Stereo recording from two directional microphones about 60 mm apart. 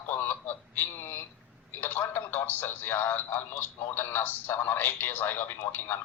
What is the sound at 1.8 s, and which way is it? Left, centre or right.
A man's voice, left.